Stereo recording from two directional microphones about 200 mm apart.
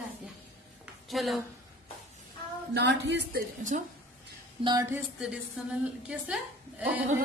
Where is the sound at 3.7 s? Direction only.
40° right (ahead or behind).